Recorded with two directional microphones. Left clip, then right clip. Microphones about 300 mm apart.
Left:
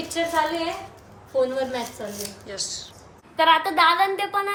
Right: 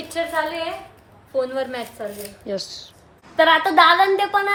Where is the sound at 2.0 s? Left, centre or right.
Centre.